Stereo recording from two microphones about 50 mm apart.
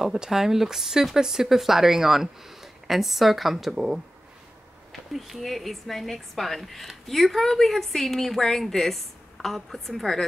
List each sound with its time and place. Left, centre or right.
0.0 s speech: centre
5.1 s speech: centre